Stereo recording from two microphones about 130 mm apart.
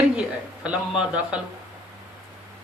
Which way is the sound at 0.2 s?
10° right (ahead or behind).